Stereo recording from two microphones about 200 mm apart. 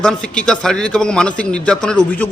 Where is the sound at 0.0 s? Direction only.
5° left (ahead or behind).